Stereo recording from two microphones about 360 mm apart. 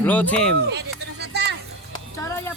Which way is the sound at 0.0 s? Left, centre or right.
Centre.